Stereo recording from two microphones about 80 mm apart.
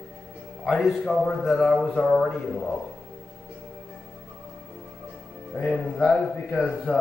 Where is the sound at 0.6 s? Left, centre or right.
Centre.